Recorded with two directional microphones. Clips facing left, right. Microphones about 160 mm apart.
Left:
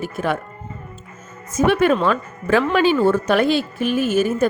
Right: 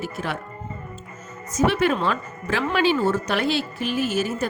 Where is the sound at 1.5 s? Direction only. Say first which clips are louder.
Left 4 dB; 55° left (ahead or behind).